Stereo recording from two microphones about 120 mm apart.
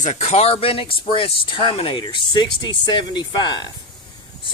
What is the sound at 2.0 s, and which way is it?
Speech, 35° left (ahead or behind).